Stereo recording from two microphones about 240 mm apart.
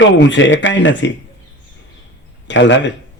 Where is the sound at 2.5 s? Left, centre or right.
Left.